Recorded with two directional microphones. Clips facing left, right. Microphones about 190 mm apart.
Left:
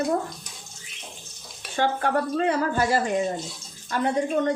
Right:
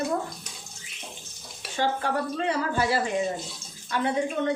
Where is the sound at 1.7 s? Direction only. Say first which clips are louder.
Left 3 dB; 55° left (ahead or behind).